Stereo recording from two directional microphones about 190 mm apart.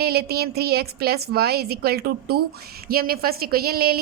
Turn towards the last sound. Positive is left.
turn(degrees=-55)  # may be behind; listen again after turning